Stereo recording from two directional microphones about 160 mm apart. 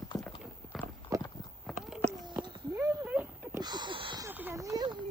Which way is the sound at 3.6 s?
25° right (ahead or behind).